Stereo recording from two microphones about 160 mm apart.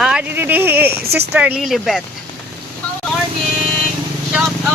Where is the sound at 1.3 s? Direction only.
5° right (ahead or behind).